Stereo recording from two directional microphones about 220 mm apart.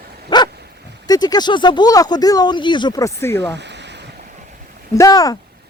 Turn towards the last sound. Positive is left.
turn(degrees=15)  # may be behind; listen again after turning